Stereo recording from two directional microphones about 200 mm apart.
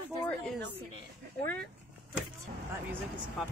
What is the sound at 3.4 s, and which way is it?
Speech, centre (ahead or behind).